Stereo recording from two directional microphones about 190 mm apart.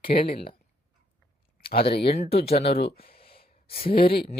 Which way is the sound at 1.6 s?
55° left (ahead or behind).